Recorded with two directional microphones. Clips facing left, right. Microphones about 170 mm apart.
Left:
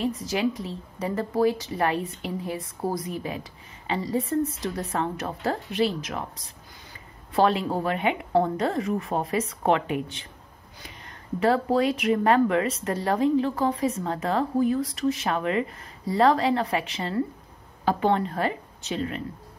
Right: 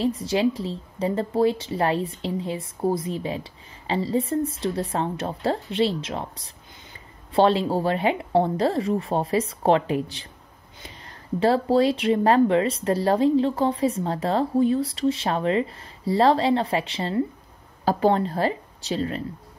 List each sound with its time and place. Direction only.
0.0 s a woman's voice: 30° right (ahead or behind)
11.3 s a woman's voice: 30° right (ahead or behind)